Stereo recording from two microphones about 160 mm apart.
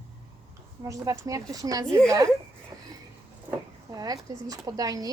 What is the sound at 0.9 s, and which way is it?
Speech, 20° right (ahead or behind).